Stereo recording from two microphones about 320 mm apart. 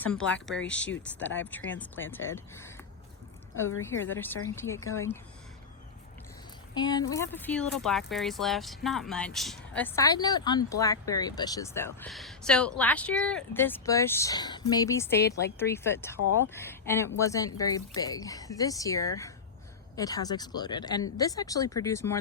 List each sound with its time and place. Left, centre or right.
0.0 s speech: centre
1.5 s speech: centre
3.7 s a woman's voice: left
4.0 s speech: centre
4.8 s a woman's voice: left
6.8 s speech: centre